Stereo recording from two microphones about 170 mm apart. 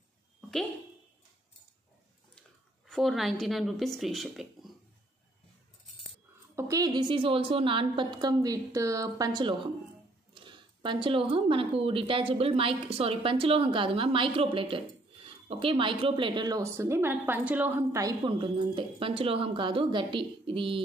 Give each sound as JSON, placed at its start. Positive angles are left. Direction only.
{"t": 2.9, "sound": "speech", "side_deg": 0}
{"t": 6.5, "sound": "speech", "side_deg": -20}